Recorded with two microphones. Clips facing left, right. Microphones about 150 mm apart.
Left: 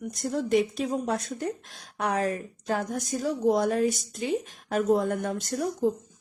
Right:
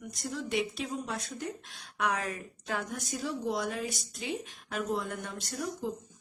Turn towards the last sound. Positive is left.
turn(degrees=45)  # may be behind; listen again after turning